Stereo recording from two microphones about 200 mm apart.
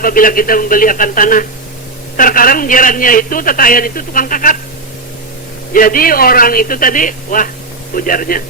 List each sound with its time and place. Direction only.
0.0 s a man's voice: 45° left (ahead or behind)
5.7 s a man's voice: 45° left (ahead or behind)